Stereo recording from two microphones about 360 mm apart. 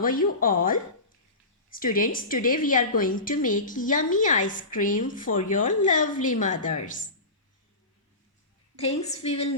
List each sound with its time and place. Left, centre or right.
0.0 s a woman's voice: left
8.7 s a woman's voice: centre